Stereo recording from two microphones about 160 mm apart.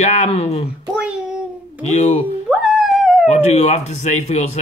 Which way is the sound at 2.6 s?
5° right (ahead or behind).